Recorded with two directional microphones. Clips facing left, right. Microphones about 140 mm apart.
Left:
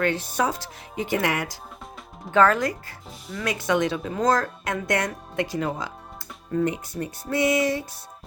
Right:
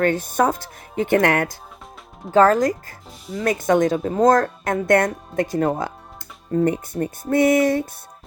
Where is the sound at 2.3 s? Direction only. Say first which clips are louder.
Right 5 dB; 40° right (ahead or behind).